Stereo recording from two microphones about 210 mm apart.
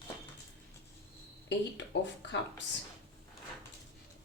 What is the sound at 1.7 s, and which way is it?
Speech, 60° left (ahead or behind).